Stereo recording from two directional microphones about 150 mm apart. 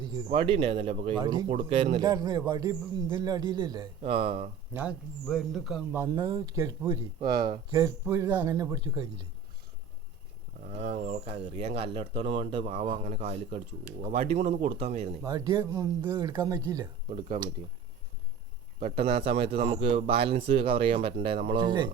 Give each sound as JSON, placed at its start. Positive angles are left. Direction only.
{"t": 0.3, "sound": "speech", "side_deg": -40}
{"t": 1.2, "sound": "speech", "side_deg": -30}
{"t": 1.5, "sound": "speech", "side_deg": -40}
{"t": 2.0, "sound": "speech", "side_deg": -25}
{"t": 4.7, "sound": "speech", "side_deg": -10}
{"t": 5.9, "sound": "speech", "side_deg": -20}
{"t": 10.7, "sound": "speech", "side_deg": -50}
{"t": 15.2, "sound": "speech", "side_deg": -25}
{"t": 18.8, "sound": "speech", "side_deg": -45}
{"t": 21.6, "sound": "speech", "side_deg": -30}